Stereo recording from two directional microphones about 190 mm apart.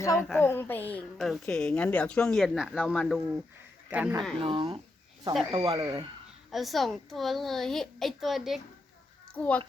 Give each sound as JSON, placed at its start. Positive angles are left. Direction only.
{"t": 0.0, "sound": "a child's voice", "side_deg": 15}
{"t": 3.8, "sound": "speech", "side_deg": -10}
{"t": 4.4, "sound": "speech", "side_deg": -30}
{"t": 6.5, "sound": "a woman's voice", "side_deg": 0}